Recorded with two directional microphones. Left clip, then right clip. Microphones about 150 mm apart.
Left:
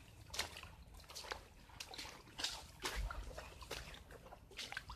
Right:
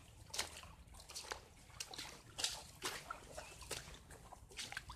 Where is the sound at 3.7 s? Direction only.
10° right (ahead or behind).